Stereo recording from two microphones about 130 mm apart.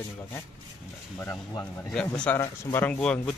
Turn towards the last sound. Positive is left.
turn(degrees=5)  # may be behind; listen again after turning